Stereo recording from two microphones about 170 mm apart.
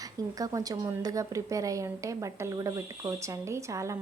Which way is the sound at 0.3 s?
20° right (ahead or behind).